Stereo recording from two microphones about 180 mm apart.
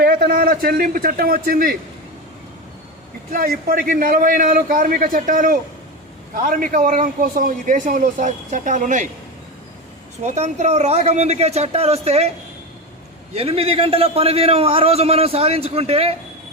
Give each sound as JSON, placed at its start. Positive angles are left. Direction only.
{"t": 0.0, "sound": "a man's voice", "side_deg": -55}
{"t": 3.3, "sound": "a man's voice", "side_deg": -55}
{"t": 10.2, "sound": "a man's voice", "side_deg": -40}
{"t": 13.3, "sound": "a man's voice", "side_deg": -30}